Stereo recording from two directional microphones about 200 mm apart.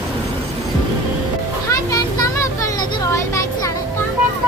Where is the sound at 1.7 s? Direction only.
15° left (ahead or behind).